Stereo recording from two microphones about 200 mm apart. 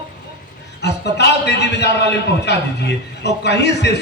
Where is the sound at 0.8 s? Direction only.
55° left (ahead or behind).